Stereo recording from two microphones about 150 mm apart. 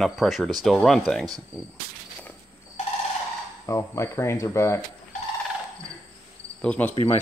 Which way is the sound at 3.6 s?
20° left (ahead or behind).